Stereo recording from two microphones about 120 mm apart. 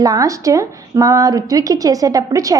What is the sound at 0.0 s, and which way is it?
A woman's voice, 30° right (ahead or behind).